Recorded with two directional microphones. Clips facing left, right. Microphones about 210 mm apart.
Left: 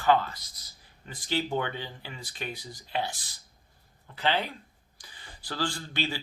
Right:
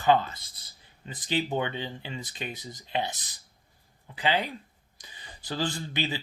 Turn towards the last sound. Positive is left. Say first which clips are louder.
# right 1 dB
turn(degrees=-20)  # may be behind; listen again after turning